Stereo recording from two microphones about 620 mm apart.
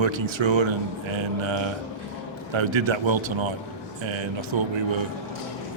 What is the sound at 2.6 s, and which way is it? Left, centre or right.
Speech, right.